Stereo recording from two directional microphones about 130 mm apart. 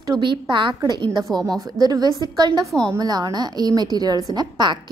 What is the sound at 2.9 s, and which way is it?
A woman's voice, 30° right (ahead or behind).